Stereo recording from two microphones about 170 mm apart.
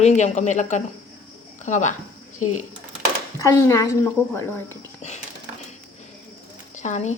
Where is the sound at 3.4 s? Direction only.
15° left (ahead or behind).